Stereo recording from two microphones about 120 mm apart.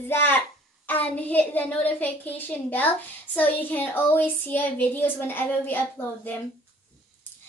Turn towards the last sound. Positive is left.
turn(degrees=15)  # may be behind; listen again after turning